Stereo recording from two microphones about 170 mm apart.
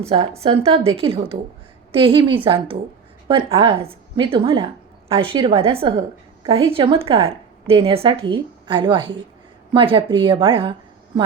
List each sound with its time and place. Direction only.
0.0 s a woman's voice: 35° right (ahead or behind)